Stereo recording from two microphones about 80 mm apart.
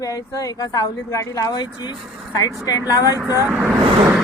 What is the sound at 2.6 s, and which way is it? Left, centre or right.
Speech, left.